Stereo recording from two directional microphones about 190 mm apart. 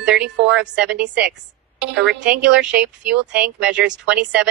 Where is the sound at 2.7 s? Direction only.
5° right (ahead or behind).